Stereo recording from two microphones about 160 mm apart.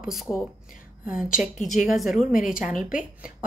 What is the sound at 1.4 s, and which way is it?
A woman's voice, 10° right (ahead or behind).